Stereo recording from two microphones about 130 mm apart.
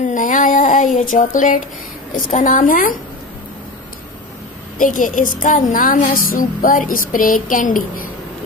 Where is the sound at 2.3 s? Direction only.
75° left (ahead or behind).